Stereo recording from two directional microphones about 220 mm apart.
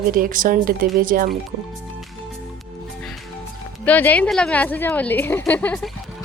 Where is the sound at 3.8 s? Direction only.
5° left (ahead or behind).